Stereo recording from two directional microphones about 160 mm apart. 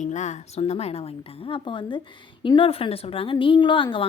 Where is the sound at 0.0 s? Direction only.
45° left (ahead or behind).